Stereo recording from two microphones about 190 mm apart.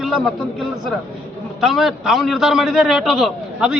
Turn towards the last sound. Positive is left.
turn(degrees=-5)  # may be behind; listen again after turning